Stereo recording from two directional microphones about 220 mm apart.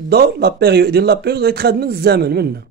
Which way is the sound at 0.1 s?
45° right (ahead or behind).